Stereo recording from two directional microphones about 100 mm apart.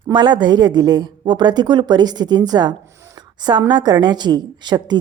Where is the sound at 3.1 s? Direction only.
45° right (ahead or behind).